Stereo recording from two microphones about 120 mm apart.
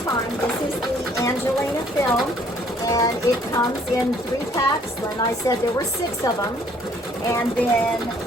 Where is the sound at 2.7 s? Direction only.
30° left (ahead or behind).